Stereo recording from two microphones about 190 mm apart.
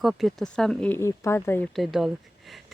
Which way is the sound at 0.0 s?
Centre (ahead or behind).